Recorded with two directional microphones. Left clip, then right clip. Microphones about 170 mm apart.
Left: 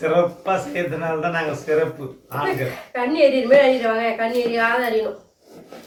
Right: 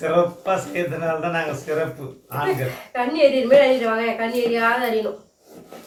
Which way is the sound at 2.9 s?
20° left (ahead or behind).